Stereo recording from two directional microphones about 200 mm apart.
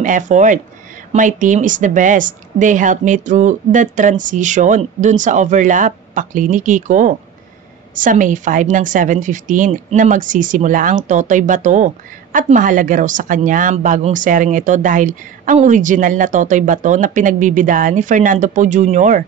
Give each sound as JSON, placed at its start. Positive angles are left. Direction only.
{"t": 0.0, "sound": "speech", "side_deg": -40}